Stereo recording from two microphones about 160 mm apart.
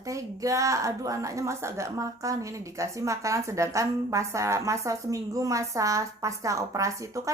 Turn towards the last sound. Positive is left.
turn(degrees=-20)  # may be behind; listen again after turning